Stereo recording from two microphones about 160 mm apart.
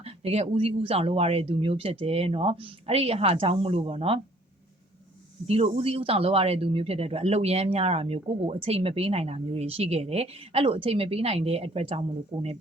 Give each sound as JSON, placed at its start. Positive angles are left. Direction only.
{"t": 0.0, "sound": "speech", "side_deg": -40}
{"t": 5.5, "sound": "speech", "side_deg": -40}